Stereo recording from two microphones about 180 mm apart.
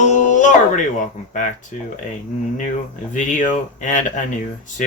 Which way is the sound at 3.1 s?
45° left (ahead or behind).